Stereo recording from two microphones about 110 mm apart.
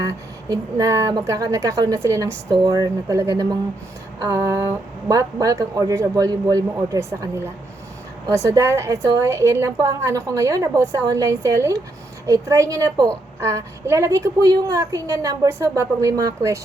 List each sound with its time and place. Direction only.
0.0 s a woman's voice: 30° right (ahead or behind)